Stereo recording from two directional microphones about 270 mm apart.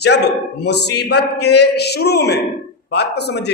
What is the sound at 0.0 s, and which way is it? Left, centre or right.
A woman's voice, left.